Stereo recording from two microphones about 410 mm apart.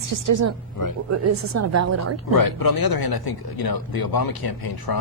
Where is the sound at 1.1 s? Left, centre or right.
Right.